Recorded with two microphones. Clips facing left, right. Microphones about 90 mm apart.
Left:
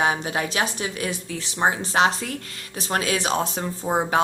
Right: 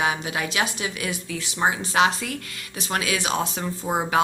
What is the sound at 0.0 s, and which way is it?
Speech, 35° left (ahead or behind).